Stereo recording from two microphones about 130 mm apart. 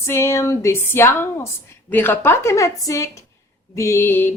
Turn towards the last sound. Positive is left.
turn(degrees=15)  # may be behind; listen again after turning